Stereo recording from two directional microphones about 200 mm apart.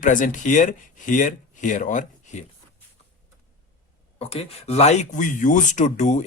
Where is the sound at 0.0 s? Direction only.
40° left (ahead or behind).